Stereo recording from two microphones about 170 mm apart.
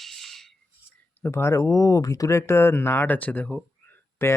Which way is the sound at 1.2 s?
15° left (ahead or behind).